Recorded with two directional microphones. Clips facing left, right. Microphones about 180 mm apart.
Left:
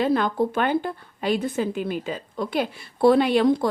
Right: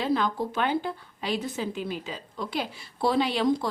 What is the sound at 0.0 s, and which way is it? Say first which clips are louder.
Speech: left 5 dB; 55° left (ahead or behind).